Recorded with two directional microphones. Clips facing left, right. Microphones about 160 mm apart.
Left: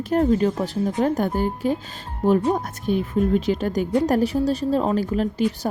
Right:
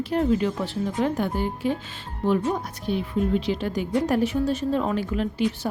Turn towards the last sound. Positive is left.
turn(degrees=40)  # may be behind; listen again after turning